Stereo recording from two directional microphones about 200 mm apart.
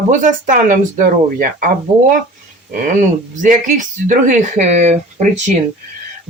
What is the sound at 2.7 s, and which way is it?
Speech, 40° right (ahead or behind).